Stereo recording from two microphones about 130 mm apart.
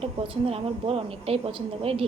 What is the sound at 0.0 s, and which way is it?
A woman's voice, 50° right (ahead or behind).